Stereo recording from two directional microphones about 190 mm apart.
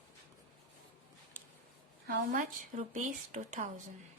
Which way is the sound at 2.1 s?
40° right (ahead or behind).